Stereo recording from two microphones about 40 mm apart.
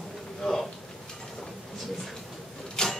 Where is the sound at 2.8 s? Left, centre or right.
Centre.